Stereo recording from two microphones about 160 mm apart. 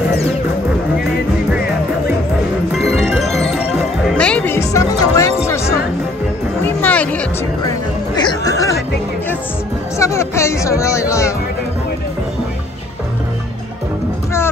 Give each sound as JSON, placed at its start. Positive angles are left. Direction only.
{"t": 2.8, "sound": "music", "side_deg": 0}
{"t": 6.6, "sound": "music", "side_deg": 10}
{"t": 8.3, "sound": "music", "side_deg": 20}
{"t": 9.9, "sound": "music", "side_deg": 20}